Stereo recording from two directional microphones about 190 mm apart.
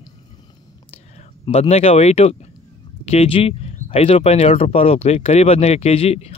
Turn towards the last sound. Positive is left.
turn(degrees=35)  # may be behind; listen again after turning